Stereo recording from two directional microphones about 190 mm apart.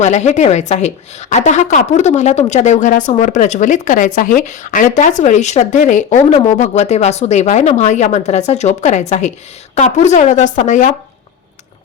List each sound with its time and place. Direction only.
0.0 s a woman's voice: 40° left (ahead or behind)